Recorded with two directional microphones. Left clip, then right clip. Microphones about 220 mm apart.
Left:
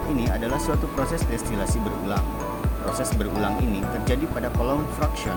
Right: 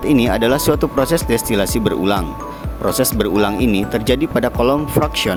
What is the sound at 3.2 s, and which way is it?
Speech, 45° right (ahead or behind).